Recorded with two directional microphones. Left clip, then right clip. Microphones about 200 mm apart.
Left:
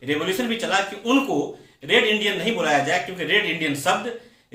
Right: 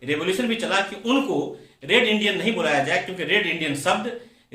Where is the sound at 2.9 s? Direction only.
20° right (ahead or behind).